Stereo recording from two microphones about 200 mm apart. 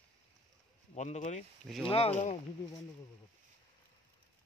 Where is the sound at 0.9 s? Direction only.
35° left (ahead or behind).